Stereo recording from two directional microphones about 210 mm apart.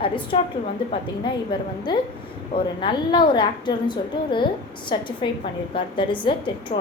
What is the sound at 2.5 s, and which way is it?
A woman's voice, 25° left (ahead or behind).